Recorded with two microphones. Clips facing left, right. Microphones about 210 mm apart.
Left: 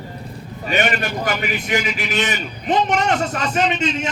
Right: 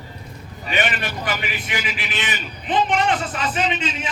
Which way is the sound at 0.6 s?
40° left (ahead or behind).